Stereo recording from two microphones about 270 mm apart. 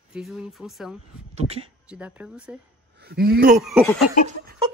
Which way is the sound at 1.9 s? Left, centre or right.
Centre.